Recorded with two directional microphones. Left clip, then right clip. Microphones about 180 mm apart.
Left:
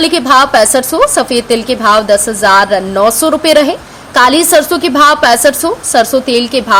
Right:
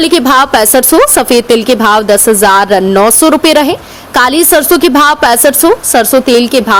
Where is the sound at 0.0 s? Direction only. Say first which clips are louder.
Right 1 dB; 45° right (ahead or behind).